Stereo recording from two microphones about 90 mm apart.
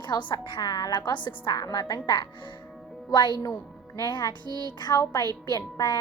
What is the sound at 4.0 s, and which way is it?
Speech, 45° left (ahead or behind).